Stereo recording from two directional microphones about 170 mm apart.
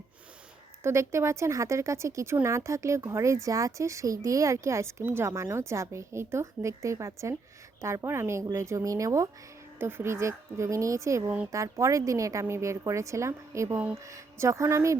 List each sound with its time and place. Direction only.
0.8 s speech: 15° right (ahead or behind)